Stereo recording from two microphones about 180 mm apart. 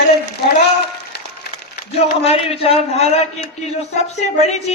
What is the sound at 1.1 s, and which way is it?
Applause, 65° left (ahead or behind).